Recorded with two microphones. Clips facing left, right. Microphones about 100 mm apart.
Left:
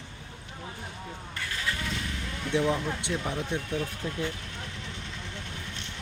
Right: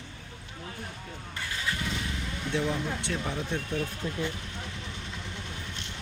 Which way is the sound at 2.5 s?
20° left (ahead or behind).